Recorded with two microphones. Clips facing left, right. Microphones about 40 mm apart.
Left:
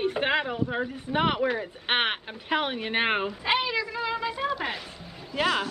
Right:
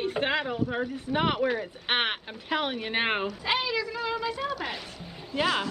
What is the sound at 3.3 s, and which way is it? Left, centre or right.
Speech, centre.